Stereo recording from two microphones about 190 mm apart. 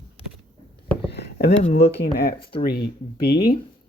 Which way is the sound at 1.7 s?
60° left (ahead or behind).